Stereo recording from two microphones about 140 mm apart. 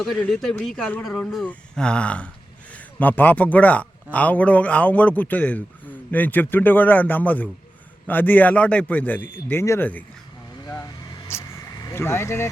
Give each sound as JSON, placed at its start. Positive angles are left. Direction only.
{"t": 0.2, "sound": "speech", "side_deg": 5}
{"t": 11.3, "sound": "vehicle", "side_deg": 20}